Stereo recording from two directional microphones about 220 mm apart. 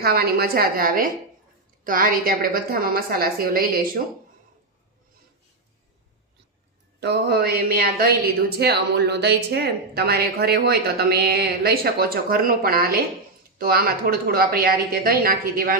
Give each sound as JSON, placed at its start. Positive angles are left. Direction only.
{"t": 0.0, "sound": "a woman's voice", "side_deg": -45}
{"t": 7.0, "sound": "speech", "side_deg": -45}